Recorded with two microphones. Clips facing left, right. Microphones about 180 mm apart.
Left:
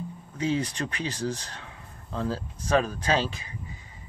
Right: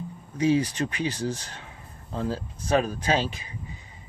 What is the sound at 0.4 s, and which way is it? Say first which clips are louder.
Speech: right 5 dB; 10° right (ahead or behind).